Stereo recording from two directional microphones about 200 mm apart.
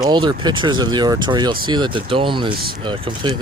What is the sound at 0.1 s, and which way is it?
Speech, 20° right (ahead or behind).